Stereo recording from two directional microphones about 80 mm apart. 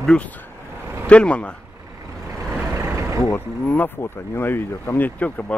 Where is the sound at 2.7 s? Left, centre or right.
Right.